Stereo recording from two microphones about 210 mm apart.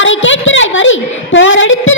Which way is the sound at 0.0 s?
65° left (ahead or behind).